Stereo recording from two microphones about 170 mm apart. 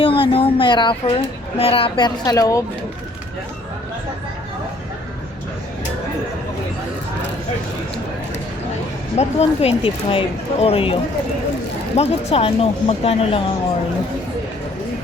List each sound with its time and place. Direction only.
0.0 s speech: 30° left (ahead or behind)
9.1 s speech: 40° left (ahead or behind)
11.9 s speech: 35° left (ahead or behind)